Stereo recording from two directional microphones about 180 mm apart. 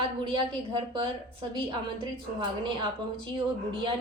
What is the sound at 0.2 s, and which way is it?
Speech, 25° right (ahead or behind).